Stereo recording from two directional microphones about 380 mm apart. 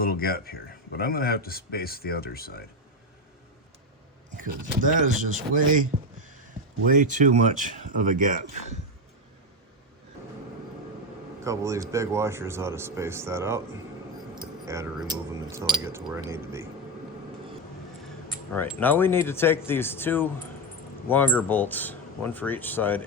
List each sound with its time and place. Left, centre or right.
0.0 s speech: left
5.0 s speech: centre
11.4 s speech: centre
14.7 s speech: centre
18.5 s speech: centre